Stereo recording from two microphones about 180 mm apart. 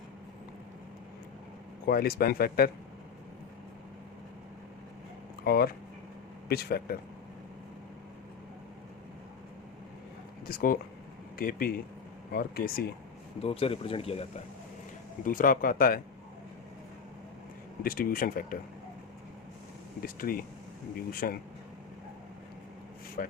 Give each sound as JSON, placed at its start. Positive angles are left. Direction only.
{"t": 1.9, "sound": "speech", "side_deg": 60}
{"t": 5.5, "sound": "speech", "side_deg": 60}
{"t": 10.4, "sound": "speech", "side_deg": 55}
{"t": 13.4, "sound": "speech", "side_deg": 35}
{"t": 15.2, "sound": "speech", "side_deg": 50}
{"t": 17.8, "sound": "speech", "side_deg": 55}
{"t": 20.0, "sound": "speech", "side_deg": 55}
{"t": 23.2, "sound": "speech", "side_deg": 50}